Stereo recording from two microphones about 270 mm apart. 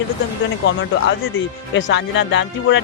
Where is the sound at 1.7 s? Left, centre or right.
Left.